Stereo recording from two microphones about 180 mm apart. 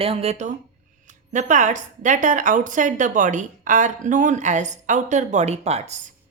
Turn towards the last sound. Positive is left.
turn(degrees=-35)  # may be behind; listen again after turning